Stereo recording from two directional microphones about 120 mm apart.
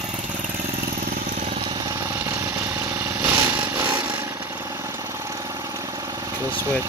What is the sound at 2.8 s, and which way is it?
Vehicle, 20° right (ahead or behind).